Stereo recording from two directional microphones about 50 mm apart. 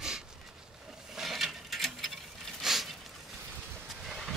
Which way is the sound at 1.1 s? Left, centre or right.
Centre.